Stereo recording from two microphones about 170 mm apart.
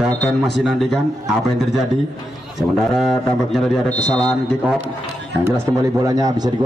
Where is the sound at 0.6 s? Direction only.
Centre (ahead or behind).